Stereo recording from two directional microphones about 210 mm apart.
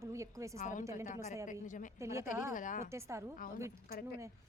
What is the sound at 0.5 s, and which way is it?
Speech, 35° left (ahead or behind).